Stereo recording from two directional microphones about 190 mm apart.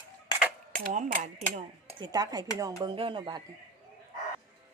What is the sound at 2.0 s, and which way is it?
Speech, 20° right (ahead or behind).